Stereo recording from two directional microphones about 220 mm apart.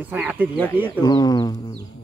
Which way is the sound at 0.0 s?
5° right (ahead or behind).